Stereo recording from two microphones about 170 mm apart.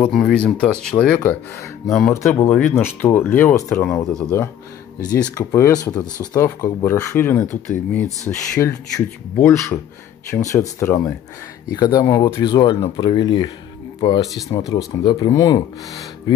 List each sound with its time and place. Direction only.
0.0 s speech: 5° left (ahead or behind)
3.8 s speech: 5° left (ahead or behind)
5.3 s speech: 20° left (ahead or behind)